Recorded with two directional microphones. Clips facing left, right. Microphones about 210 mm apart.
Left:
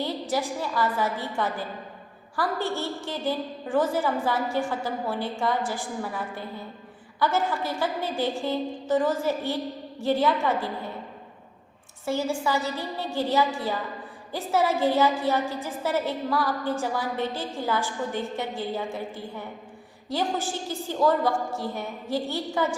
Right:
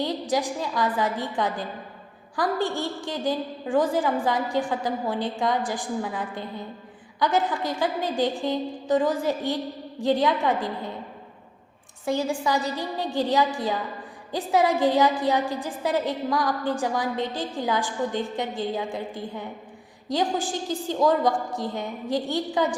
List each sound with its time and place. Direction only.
0.0 s a woman's voice: 15° right (ahead or behind)
12.0 s a woman's voice: 15° right (ahead or behind)